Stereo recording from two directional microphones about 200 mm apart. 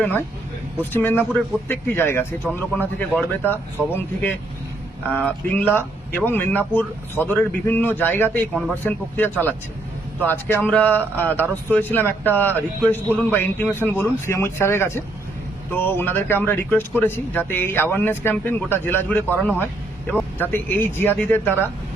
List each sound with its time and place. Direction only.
0.0 s a man's voice: 10° left (ahead or behind)
3.1 s speech: 5° right (ahead or behind)
3.5 s a man's voice: 10° left (ahead or behind)